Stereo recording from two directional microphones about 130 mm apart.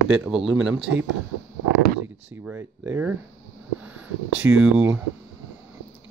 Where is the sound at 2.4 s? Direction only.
15° right (ahead or behind).